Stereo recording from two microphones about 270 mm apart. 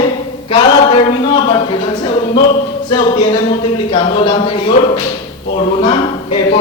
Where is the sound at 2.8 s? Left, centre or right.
Centre.